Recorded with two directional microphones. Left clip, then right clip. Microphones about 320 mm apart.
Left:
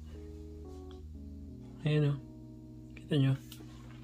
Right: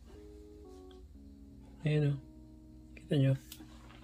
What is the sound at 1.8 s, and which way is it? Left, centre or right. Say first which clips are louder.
Speech: left 1 dB; centre.